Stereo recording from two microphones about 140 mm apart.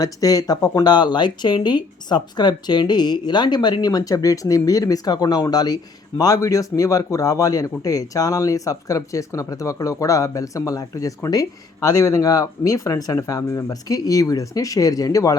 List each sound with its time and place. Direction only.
0.0 s speech: 25° left (ahead or behind)